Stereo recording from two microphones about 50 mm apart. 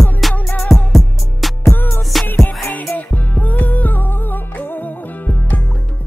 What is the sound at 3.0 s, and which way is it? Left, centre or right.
Music, left.